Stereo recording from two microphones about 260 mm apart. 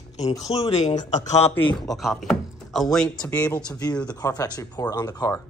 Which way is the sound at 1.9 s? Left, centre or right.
Centre.